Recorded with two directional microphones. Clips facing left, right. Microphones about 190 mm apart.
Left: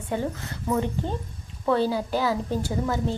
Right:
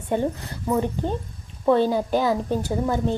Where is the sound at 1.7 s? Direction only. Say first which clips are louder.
Right 4 dB; 20° right (ahead or behind).